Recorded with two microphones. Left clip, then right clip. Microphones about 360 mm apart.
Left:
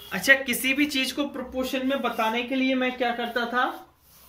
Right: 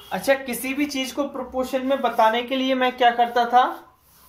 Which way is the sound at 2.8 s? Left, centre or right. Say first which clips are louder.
Right 8 dB; right.